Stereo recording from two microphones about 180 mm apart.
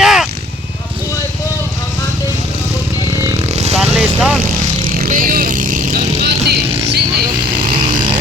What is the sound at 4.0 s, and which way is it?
Vehicle, centre (ahead or behind).